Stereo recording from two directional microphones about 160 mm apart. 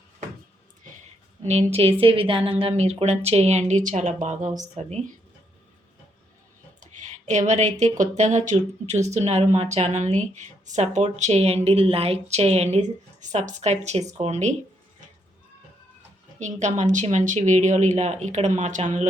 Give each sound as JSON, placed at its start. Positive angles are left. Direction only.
{"t": 1.5, "sound": "speech", "side_deg": -40}
{"t": 6.7, "sound": "speech", "side_deg": -50}
{"t": 16.4, "sound": "speech", "side_deg": -45}